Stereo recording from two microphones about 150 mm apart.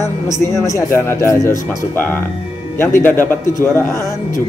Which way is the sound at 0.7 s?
20° left (ahead or behind).